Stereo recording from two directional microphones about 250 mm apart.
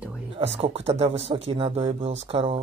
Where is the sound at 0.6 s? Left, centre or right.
Right.